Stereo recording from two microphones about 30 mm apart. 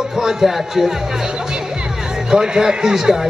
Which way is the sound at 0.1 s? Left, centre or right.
Centre.